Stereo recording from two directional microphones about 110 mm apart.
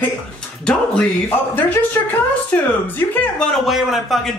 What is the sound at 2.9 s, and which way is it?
Speech, 15° left (ahead or behind).